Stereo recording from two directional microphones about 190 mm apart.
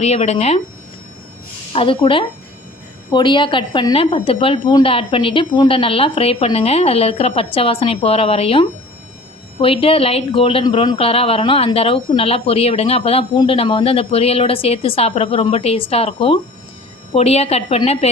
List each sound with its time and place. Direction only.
0.0 s speech: 35° left (ahead or behind)
1.7 s a woman's voice: 30° left (ahead or behind)